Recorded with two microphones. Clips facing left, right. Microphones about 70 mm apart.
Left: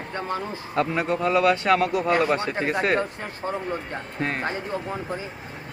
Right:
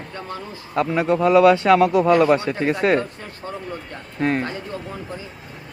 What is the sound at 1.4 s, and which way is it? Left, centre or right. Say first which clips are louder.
Speech: right 6 dB; right.